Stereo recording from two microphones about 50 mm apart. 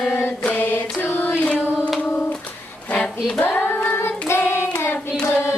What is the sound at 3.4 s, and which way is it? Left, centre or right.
Child singing, left.